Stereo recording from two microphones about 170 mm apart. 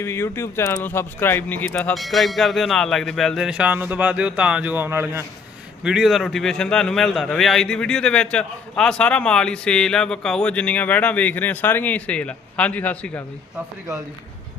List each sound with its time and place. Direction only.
0.0 s a man's voice: 15° left (ahead or behind); by 5.2 s 15° right (ahead or behind)
5.8 s a man's voice: 5° right (ahead or behind)